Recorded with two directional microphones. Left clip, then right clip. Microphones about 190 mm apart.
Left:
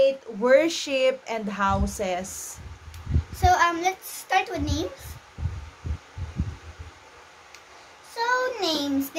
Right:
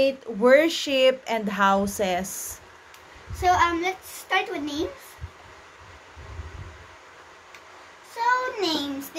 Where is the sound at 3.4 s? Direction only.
25° left (ahead or behind).